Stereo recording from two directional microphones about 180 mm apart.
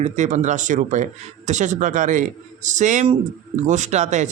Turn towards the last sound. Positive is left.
turn(degrees=-40)  # may be behind; listen again after turning